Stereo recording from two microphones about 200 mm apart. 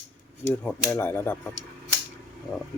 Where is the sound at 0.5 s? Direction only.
5° left (ahead or behind).